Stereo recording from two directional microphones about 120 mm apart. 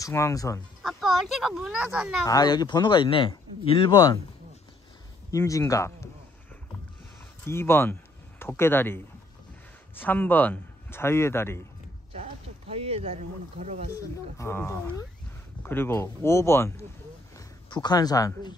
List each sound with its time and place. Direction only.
0.0 s a man's voice: 25° left (ahead or behind)
0.8 s speech: centre (ahead or behind)
2.2 s speech: 35° left (ahead or behind)
3.9 s speech: 30° left (ahead or behind)
5.3 s a man's voice: 25° left (ahead or behind)
7.4 s a man's voice: 20° left (ahead or behind)
12.1 s speech: 60° right (ahead or behind); by 13.8 s 75° right (ahead or behind)
13.9 s a man's voice: 20° left (ahead or behind)
17.4 s speech: 40° left (ahead or behind)